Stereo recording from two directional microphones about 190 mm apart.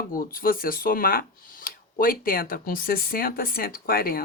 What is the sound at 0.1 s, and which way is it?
Speech, 45° left (ahead or behind).